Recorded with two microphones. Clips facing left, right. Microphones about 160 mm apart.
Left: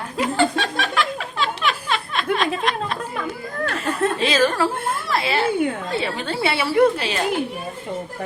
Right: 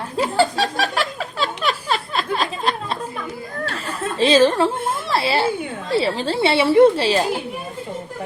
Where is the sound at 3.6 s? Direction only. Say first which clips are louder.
Left 6 dB; 30° right (ahead or behind).